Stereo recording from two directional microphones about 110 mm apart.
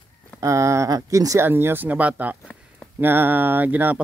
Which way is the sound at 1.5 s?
20° right (ahead or behind).